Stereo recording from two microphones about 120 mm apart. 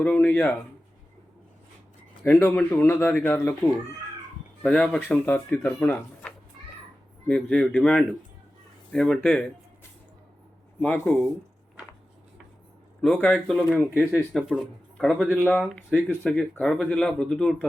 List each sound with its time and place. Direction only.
0.0 s speech: 10° left (ahead or behind)
2.2 s speech: 15° left (ahead or behind)
4.6 s speech: 5° left (ahead or behind)
10.8 s speech: 15° left (ahead or behind)
13.0 s speech: 15° left (ahead or behind)
13.9 s speech: 15° right (ahead or behind)
14.9 s a man's voice: 5° left (ahead or behind)